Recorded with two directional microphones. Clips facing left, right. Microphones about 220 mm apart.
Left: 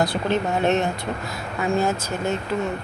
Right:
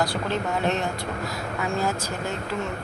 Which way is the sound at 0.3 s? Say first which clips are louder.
Left 4 dB; 20° left (ahead or behind).